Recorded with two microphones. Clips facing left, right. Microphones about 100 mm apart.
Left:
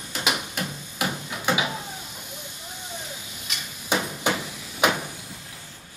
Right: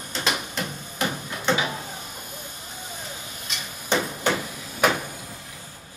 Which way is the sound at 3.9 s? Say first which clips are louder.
Right 2 dB; 10° left (ahead or behind).